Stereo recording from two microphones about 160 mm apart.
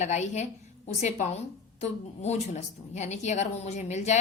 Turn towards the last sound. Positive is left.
turn(degrees=45)  # may be behind; listen again after turning